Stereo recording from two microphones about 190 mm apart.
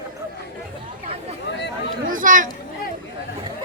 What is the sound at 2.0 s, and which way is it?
Speech, 45° right (ahead or behind).